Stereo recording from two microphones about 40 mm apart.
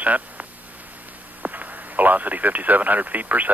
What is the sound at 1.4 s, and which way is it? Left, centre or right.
Speech, right.